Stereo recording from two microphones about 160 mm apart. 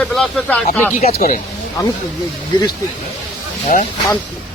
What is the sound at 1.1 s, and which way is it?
Speech, 60° left (ahead or behind).